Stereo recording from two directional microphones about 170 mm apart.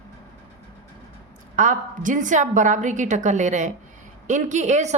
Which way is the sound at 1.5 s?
50° right (ahead or behind).